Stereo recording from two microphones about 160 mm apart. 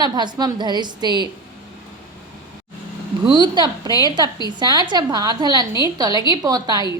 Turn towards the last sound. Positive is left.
turn(degrees=-25)  # may be behind; listen again after turning